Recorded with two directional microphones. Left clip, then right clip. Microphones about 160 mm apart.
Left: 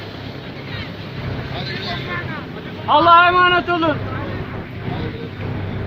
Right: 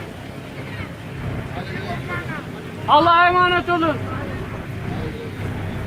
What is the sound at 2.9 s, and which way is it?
Speech, 55° left (ahead or behind).